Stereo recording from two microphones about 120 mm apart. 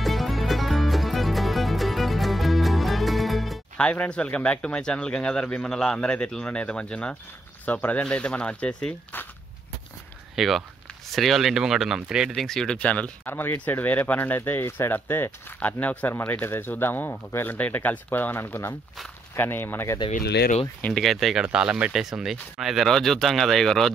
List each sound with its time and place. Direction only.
0.0 s music: centre (ahead or behind)
7.6 s speech: 15° left (ahead or behind)
10.3 s speech: centre (ahead or behind); by 20.0 s 20° left (ahead or behind)
20.8 s speech: 5° left (ahead or behind)